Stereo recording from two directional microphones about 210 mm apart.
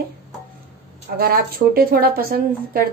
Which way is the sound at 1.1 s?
45° right (ahead or behind).